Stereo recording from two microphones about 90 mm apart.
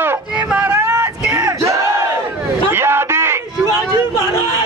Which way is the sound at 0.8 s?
40° right (ahead or behind).